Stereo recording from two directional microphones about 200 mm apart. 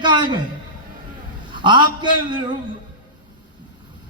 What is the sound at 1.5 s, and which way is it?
Speech, 25° right (ahead or behind).